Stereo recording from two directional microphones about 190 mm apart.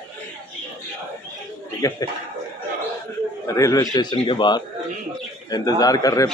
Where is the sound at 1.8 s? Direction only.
15° left (ahead or behind).